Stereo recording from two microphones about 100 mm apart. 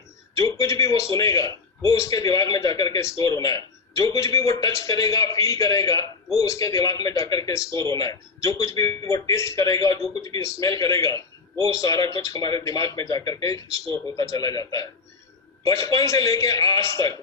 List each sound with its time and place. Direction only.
0.3 s a man's voice: 35° left (ahead or behind)